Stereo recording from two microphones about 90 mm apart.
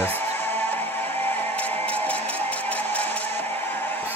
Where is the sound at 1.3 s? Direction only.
20° left (ahead or behind).